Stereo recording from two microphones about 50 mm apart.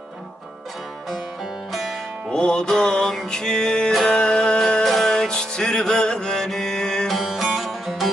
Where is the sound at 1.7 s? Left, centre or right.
Centre.